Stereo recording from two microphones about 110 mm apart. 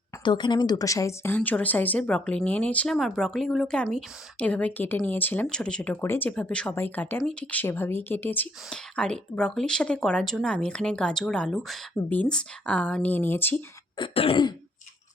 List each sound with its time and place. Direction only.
0.3 s speech: 45° left (ahead or behind); by 1.4 s 25° left (ahead or behind)
1.4 s speech: 15° left (ahead or behind)
2.9 s speech: centre (ahead or behind)
4.4 s speech: 15° left (ahead or behind)
8.7 s speech: 5° left (ahead or behind)
14.1 s throat clearing: 65° left (ahead or behind)